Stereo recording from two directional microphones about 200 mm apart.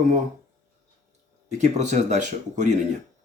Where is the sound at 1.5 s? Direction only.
35° right (ahead or behind).